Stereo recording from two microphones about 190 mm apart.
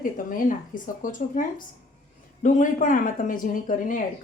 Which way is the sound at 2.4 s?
40° left (ahead or behind).